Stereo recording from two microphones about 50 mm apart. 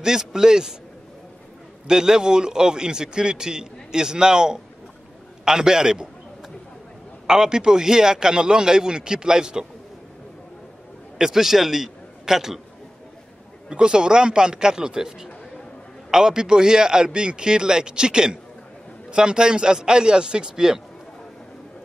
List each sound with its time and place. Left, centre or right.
0.0 s a man's voice: centre
1.9 s a man's voice: centre
7.2 s a man's voice: centre
11.1 s a man's voice: centre
13.7 s a man's voice: centre